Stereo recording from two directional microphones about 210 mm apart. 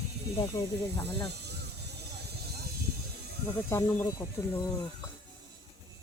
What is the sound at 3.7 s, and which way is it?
Speech, 10° left (ahead or behind).